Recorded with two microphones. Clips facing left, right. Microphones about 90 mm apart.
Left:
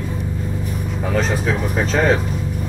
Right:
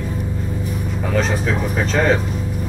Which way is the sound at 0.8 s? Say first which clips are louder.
Even; centre (ahead or behind).